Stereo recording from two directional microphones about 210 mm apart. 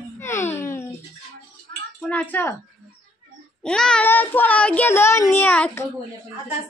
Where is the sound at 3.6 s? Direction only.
5° left (ahead or behind).